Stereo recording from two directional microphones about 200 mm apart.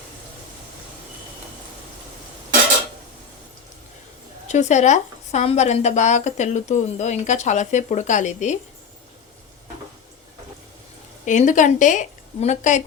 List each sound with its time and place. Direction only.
4.4 s speech: 35° left (ahead or behind)
11.3 s speech: 40° left (ahead or behind)